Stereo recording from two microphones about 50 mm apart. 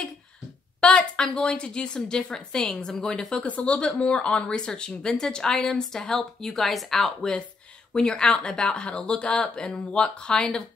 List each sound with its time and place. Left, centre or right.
0.7 s a woman's voice: centre
3.4 s a woman's voice: left; by 7.3 s centre
7.9 s a woman's voice: centre